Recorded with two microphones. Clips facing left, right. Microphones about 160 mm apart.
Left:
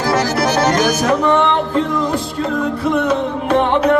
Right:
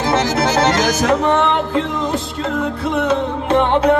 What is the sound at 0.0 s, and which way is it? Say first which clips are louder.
Accordion: even; 25° right (ahead or behind).